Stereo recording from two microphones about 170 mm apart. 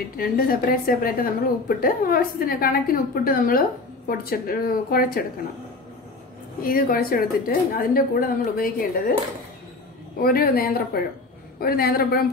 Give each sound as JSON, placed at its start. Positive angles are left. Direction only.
{"t": 0.2, "sound": "a woman's voice", "side_deg": 60}
{"t": 6.6, "sound": "a woman's voice", "side_deg": 55}
{"t": 10.2, "sound": "a woman's voice", "side_deg": 60}